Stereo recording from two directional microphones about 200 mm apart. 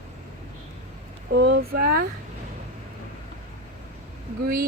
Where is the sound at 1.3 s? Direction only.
55° right (ahead or behind).